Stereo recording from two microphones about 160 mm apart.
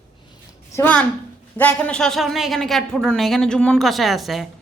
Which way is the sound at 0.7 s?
10° left (ahead or behind).